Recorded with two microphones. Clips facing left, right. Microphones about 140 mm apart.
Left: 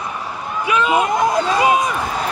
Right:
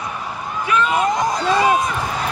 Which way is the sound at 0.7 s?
5° left (ahead or behind).